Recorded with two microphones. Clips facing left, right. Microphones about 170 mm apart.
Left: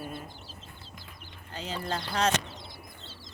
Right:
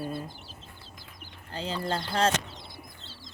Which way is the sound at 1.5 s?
30° right (ahead or behind).